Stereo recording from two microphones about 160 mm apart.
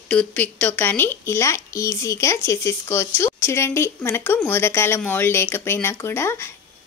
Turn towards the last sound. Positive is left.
turn(degrees=15)  # may be behind; listen again after turning